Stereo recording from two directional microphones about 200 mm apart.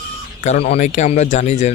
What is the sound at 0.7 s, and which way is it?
Speech, 35° left (ahead or behind).